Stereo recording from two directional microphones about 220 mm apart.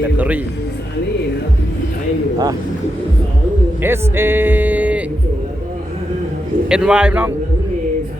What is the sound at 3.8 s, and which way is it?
A man's voice, 10° right (ahead or behind).